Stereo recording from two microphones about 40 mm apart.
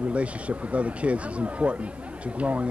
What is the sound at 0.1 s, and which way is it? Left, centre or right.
A man's voice, right.